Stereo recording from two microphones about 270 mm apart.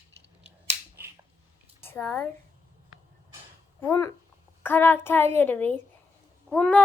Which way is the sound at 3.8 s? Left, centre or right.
Centre.